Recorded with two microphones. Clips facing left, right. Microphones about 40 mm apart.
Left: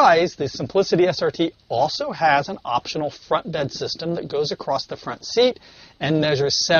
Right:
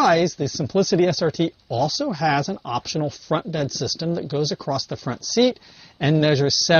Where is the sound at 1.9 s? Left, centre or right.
Centre.